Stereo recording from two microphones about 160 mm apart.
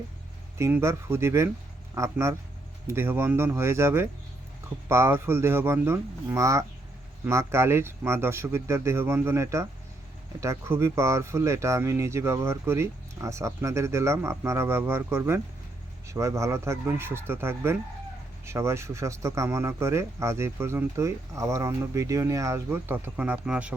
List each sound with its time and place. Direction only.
0.6 s speech: 15° right (ahead or behind)